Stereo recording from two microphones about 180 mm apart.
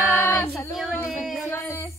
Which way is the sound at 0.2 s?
15° left (ahead or behind).